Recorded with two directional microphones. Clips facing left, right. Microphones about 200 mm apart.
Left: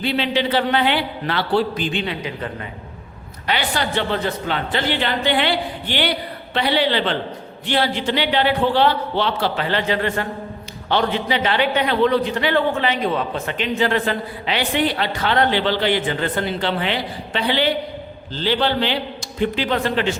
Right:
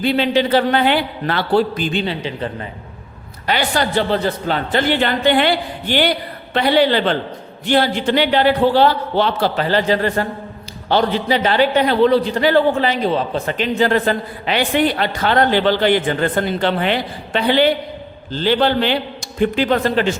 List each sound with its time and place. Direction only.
0.0 s a man's voice: 45° right (ahead or behind)
3.4 s a man's voice: 45° right (ahead or behind)